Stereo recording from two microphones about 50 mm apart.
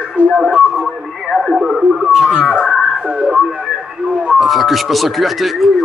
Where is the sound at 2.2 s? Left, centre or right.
Right.